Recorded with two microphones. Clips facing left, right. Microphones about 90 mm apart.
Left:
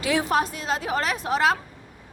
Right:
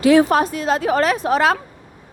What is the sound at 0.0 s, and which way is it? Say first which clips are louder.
A woman's voice: right 9 dB; 55° right (ahead or behind).